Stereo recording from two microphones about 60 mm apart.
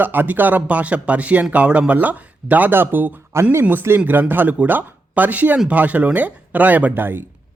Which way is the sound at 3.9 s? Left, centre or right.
Right.